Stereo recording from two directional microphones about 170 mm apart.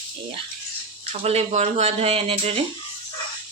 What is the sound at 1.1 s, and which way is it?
Speech, 40° right (ahead or behind).